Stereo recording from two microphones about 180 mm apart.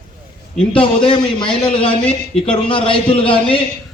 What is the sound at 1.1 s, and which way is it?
A man's voice, 25° left (ahead or behind).